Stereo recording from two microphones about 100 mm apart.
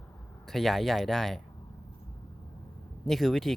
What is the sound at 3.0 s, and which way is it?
Speech, centre (ahead or behind).